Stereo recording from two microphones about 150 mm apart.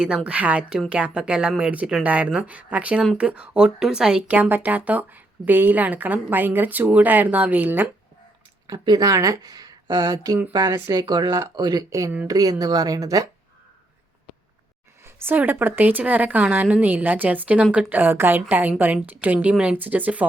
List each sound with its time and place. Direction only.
0.3 s speech: 10° right (ahead or behind)
8.6 s speech: 30° right (ahead or behind)
15.0 s speech: 15° right (ahead or behind)